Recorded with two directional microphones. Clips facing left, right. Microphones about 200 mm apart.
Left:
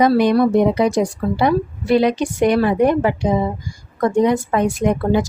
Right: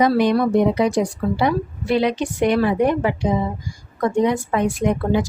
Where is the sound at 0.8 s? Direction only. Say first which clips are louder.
Left 2 dB; 40° left (ahead or behind).